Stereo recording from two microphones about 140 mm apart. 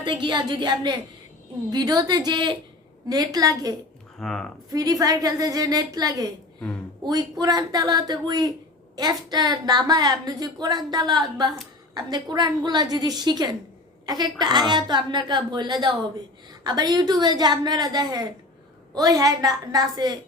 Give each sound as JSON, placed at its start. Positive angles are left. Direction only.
{"t": 0.0, "sound": "a woman's voice", "side_deg": -35}
{"t": 4.2, "sound": "speech", "side_deg": 5}
{"t": 4.7, "sound": "a woman's voice", "side_deg": -25}